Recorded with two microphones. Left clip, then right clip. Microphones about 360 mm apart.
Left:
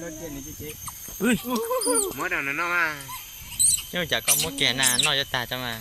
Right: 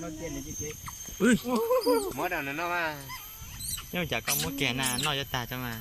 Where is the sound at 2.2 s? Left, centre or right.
Right.